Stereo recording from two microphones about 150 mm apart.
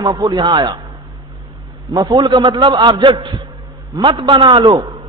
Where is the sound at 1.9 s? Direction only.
25° right (ahead or behind).